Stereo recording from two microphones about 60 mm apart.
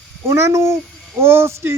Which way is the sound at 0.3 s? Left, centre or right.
Right.